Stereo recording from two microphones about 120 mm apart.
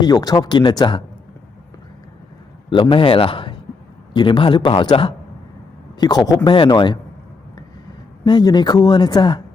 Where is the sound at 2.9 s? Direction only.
45° left (ahead or behind).